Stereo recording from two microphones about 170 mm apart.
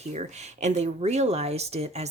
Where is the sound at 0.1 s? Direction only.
40° right (ahead or behind).